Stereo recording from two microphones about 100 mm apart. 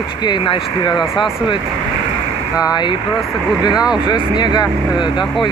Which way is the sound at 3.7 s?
10° right (ahead or behind).